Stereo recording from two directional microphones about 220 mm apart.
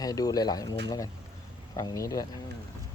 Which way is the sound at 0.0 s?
15° left (ahead or behind).